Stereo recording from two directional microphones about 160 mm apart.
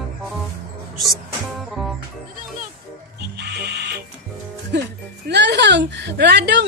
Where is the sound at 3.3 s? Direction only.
90° right.